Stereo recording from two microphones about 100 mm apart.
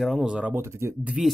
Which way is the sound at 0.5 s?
25° right (ahead or behind).